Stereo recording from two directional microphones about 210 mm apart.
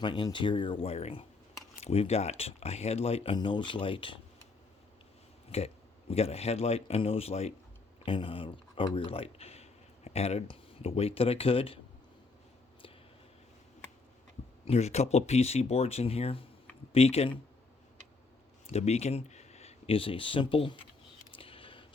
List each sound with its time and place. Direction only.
0.0 s speech: 20° left (ahead or behind)
5.5 s speech: 30° left (ahead or behind)
14.7 s speech: 30° left (ahead or behind)
18.7 s speech: 30° left (ahead or behind)
21.3 s a sound: 25° left (ahead or behind)